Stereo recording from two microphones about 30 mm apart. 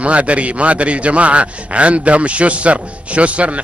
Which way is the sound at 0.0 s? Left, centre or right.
Right.